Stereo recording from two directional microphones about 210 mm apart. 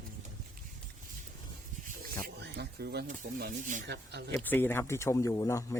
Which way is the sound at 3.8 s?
50° right (ahead or behind).